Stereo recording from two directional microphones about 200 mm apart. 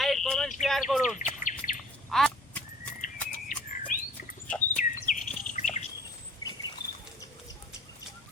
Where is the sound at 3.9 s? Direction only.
45° left (ahead or behind).